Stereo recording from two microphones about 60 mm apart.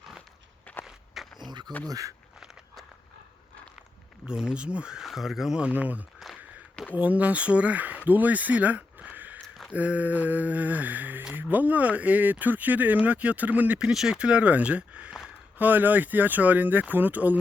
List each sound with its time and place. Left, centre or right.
0.9 s walk: centre
1.9 s speech: right
4.3 s speech: centre
5.0 s speech: centre
5.5 s speech: right
13.7 s speech: centre; by 17.3 s right